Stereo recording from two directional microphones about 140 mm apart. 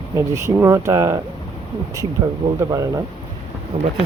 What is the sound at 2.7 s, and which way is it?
Speech, 25° right (ahead or behind).